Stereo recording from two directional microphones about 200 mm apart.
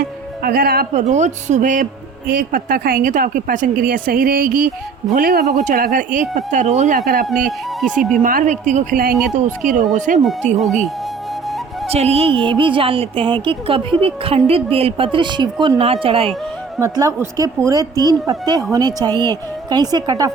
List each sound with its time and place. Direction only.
0.4 s speech: 50° right (ahead or behind)
7.4 s speech: centre (ahead or behind)
8.2 s speech: 45° right (ahead or behind)
9.1 s speech: centre (ahead or behind)
9.6 s speech: 40° right (ahead or behind)
11.9 s speech: 30° right (ahead or behind)
16.7 s speech: 15° right (ahead or behind)